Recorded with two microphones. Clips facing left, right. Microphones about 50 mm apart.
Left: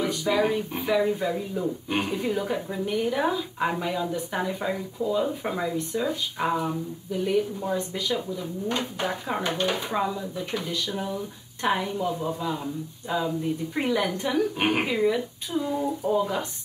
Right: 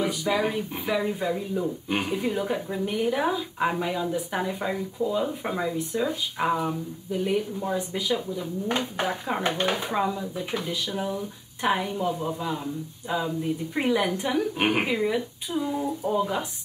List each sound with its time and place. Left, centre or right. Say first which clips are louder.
0.0 s speech: left 1 dB; centre
9.8 s speech: right 1 dB; centre